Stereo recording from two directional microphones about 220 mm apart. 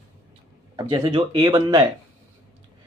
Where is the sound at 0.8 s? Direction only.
25° right (ahead or behind).